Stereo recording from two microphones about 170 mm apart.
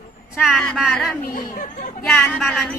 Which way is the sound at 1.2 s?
60° left (ahead or behind).